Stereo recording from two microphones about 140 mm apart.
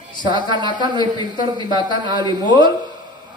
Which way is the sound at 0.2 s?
35° right (ahead or behind).